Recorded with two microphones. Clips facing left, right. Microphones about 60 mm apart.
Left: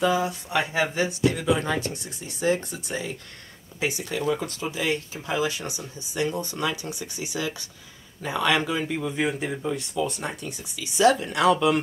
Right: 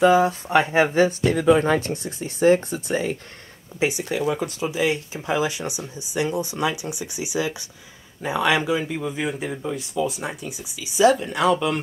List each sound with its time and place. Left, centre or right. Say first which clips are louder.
0.0 s speech: right 7 dB; right
4.1 s speech: right 3 dB; centre